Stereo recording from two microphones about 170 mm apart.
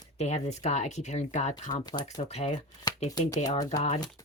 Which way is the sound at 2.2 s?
40° left (ahead or behind).